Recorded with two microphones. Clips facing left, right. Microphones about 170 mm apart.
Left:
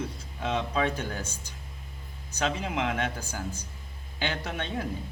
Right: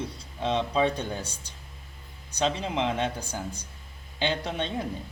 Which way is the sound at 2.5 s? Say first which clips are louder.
Right 2 dB; 25° right (ahead or behind).